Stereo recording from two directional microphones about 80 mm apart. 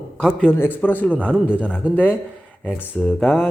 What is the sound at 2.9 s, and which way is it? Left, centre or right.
Speech, centre.